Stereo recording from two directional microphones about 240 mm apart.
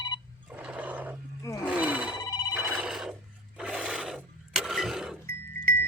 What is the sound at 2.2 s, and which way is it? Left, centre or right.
Ringtone, centre.